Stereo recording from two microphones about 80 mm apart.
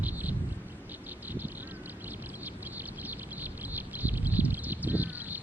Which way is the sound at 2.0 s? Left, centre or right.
Right.